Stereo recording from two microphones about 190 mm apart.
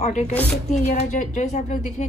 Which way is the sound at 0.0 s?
35° left (ahead or behind).